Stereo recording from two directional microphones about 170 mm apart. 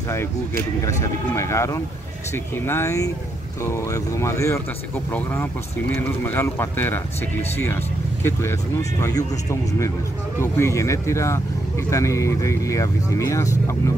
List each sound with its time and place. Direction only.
0.8 s speech: 15° left (ahead or behind)